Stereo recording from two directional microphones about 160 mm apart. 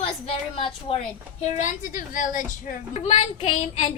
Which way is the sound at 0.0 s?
40° left (ahead or behind).